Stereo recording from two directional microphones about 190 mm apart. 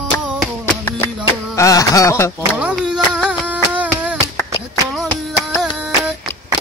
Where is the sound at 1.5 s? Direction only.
15° left (ahead or behind).